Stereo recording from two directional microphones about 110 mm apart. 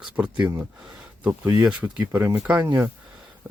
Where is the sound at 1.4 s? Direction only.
30° right (ahead or behind).